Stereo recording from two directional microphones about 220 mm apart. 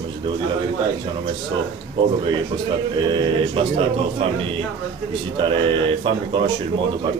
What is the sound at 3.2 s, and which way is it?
Speech, 25° right (ahead or behind).